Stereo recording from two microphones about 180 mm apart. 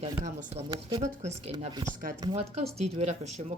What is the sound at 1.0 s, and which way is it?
Speech, 40° right (ahead or behind).